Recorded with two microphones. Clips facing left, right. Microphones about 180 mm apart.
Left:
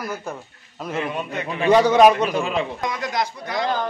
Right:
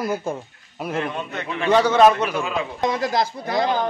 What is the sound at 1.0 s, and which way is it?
A man's voice, 5° left (ahead or behind).